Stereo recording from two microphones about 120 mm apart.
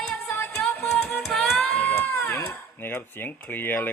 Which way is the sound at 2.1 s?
20° left (ahead or behind).